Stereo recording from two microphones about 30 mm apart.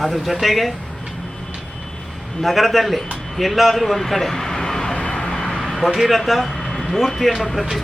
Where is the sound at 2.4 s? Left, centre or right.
Centre.